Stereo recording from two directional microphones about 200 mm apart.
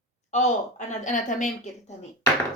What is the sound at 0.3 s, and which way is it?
A woman's voice, 35° left (ahead or behind).